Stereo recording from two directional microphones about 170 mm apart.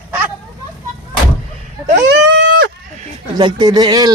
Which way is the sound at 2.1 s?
90° right.